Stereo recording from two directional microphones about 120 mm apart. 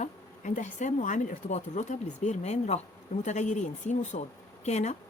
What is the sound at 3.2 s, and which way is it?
Speech, 85° left.